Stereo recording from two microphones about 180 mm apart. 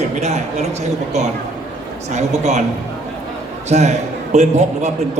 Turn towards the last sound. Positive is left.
turn(degrees=-40)  # may be behind; listen again after turning